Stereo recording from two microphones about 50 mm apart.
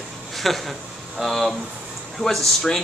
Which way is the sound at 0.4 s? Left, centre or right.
Centre.